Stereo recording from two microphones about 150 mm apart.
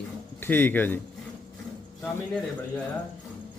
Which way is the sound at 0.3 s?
15° left (ahead or behind).